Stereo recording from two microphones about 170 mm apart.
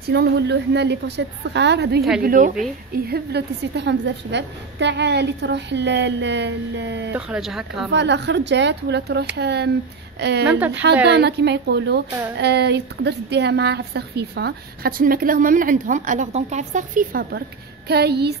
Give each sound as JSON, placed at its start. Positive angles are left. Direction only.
{"t": 0.0, "sound": "a woman's voice", "side_deg": -75}
{"t": 2.2, "sound": "a woman's voice", "side_deg": -55}
{"t": 2.9, "sound": "a woman's voice", "side_deg": -70}
{"t": 7.1, "sound": "speech", "side_deg": -5}
{"t": 7.9, "sound": "a woman's voice", "side_deg": -90}
{"t": 9.4, "sound": "a woman's voice", "side_deg": -75}
{"t": 10.4, "sound": "speech", "side_deg": -10}
{"t": 10.7, "sound": "a woman's voice", "side_deg": -90}
{"t": 11.1, "sound": "a woman's voice", "side_deg": -80}
{"t": 12.4, "sound": "a woman's voice", "side_deg": -80}
{"t": 17.8, "sound": "a woman's voice", "side_deg": -70}